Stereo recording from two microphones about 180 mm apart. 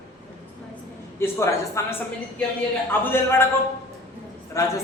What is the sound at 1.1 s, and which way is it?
Speech, 15° left (ahead or behind).